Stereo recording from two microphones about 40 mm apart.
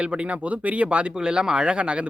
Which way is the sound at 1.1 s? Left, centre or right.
Centre.